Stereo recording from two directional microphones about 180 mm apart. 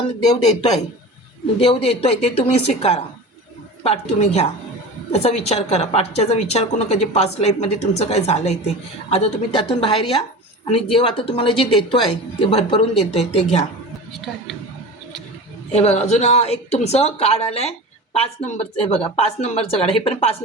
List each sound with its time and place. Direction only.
0.3 s a woman's voice: 35° left (ahead or behind)
15.7 s a woman's voice: 35° left (ahead or behind)